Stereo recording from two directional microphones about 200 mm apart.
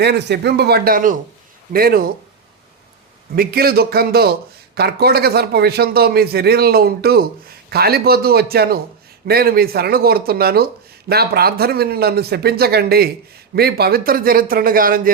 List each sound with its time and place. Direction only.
0.0 s a man's voice: 55° right (ahead or behind)
3.3 s a man's voice: 50° right (ahead or behind)